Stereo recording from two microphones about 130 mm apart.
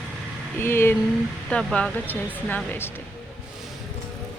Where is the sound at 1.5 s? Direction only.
10° left (ahead or behind).